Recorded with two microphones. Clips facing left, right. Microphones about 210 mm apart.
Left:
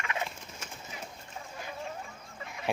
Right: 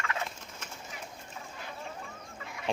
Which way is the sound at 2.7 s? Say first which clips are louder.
Left 1 dB; 5° left (ahead or behind).